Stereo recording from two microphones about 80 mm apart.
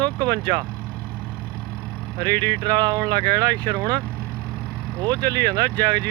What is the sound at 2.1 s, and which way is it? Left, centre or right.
Speech, right.